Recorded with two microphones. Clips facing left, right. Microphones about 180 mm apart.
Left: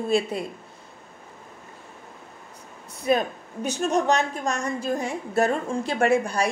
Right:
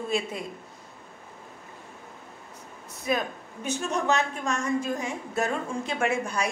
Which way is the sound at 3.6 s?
40° left (ahead or behind).